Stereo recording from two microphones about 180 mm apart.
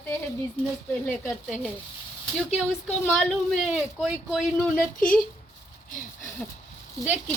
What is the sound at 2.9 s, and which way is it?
Speech, 5° left (ahead or behind).